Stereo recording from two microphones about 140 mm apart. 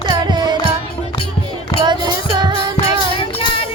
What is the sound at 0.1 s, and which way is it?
Music, 30° right (ahead or behind).